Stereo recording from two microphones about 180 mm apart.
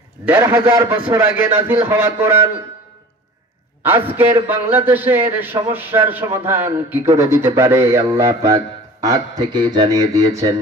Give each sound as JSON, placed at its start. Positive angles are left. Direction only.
{"t": 0.2, "sound": "a man's voice", "side_deg": -10}
{"t": 3.8, "sound": "a man's voice", "side_deg": -10}